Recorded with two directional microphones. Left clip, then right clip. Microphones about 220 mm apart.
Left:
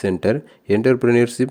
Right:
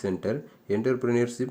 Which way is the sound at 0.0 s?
35° left (ahead or behind).